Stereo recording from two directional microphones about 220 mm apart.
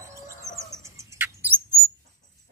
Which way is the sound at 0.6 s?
15° right (ahead or behind).